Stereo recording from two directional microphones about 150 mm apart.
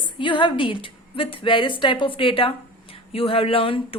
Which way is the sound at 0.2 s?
35° left (ahead or behind).